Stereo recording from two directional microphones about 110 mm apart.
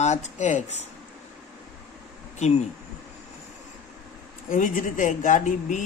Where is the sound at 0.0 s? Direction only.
90° left.